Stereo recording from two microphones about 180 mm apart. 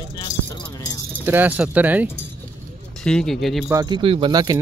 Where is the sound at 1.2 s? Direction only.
10° right (ahead or behind).